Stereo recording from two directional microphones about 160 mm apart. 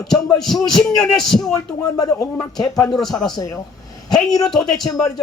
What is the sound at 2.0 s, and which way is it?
Speech, 20° left (ahead or behind).